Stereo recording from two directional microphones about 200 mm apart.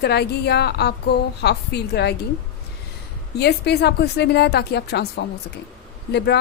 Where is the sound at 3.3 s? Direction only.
55° left (ahead or behind).